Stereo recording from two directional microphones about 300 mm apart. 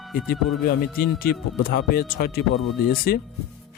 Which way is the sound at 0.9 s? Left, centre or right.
Left.